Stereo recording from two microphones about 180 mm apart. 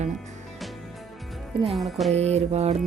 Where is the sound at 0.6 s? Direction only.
Centre (ahead or behind).